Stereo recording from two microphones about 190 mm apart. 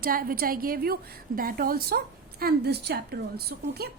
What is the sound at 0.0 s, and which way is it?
A woman's voice, 50° right (ahead or behind).